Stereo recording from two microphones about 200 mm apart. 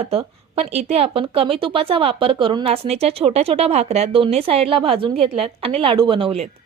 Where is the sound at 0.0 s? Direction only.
30° right (ahead or behind).